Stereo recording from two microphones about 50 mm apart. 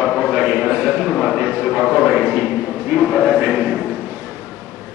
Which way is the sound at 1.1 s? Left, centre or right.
Centre.